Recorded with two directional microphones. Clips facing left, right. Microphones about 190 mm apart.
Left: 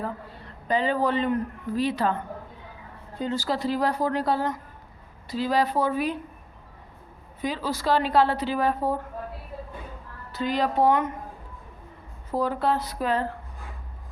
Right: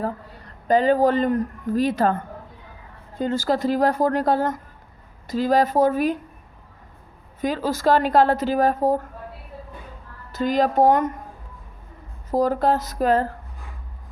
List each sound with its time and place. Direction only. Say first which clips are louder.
0.0 s a man's voice: right 5 dB; 45° right (ahead or behind)
7.4 s a woman's voice: right 6 dB; 45° right (ahead or behind)
10.3 s a woman's voice: right 5 dB; 45° right (ahead or behind)
12.3 s a woman's voice: right 5 dB; 40° right (ahead or behind)